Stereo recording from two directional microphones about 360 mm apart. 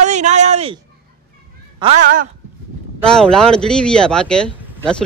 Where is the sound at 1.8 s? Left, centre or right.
Centre.